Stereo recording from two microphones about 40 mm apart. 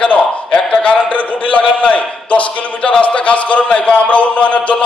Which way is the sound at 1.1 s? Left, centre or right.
Left.